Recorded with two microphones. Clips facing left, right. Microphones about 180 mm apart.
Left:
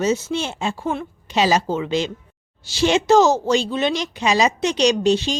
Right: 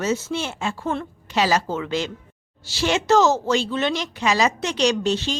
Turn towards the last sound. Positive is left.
turn(degrees=15)  # may be behind; listen again after turning